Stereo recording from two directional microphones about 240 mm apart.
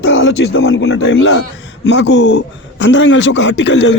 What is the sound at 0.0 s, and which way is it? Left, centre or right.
A man's voice, left.